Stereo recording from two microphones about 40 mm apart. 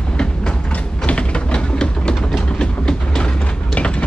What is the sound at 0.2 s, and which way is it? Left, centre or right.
Train, left.